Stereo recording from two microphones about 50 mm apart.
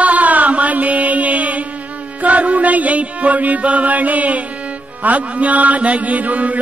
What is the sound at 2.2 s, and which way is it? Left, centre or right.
Music, right.